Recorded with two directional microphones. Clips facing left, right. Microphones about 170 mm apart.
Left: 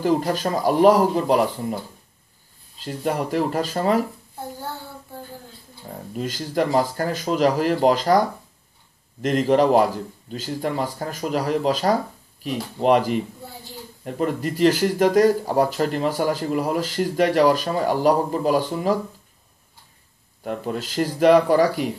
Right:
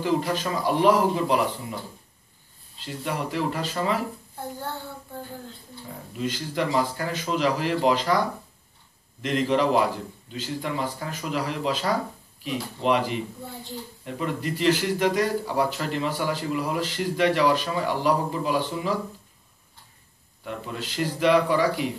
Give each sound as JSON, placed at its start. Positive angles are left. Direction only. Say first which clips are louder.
{"t": 0.0, "sound": "speech", "louder": "left 4 dB", "side_deg": 45}
{"t": 2.8, "sound": "speech", "louder": "left 5 dB", "side_deg": 45}
{"t": 6.1, "sound": "speech", "louder": "left 4 dB", "side_deg": 45}
{"t": 20.4, "sound": "speech", "louder": "left 6 dB", "side_deg": 45}